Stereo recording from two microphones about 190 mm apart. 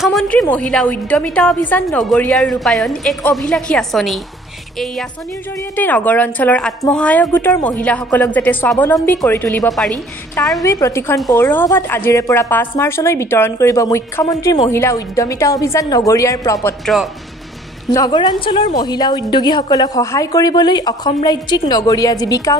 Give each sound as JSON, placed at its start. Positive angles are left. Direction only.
{"t": 0.0, "sound": "a woman's voice", "side_deg": 0}
{"t": 5.8, "sound": "a woman's voice", "side_deg": 10}
{"t": 10.6, "sound": "a woman's voice", "side_deg": 15}
{"t": 16.8, "sound": "a woman's voice", "side_deg": 0}
{"t": 17.9, "sound": "a woman's voice", "side_deg": 20}